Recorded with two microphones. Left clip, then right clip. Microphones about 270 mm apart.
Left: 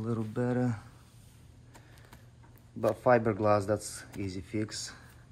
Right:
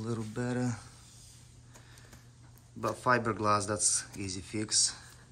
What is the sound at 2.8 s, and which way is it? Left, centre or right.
Speech, centre.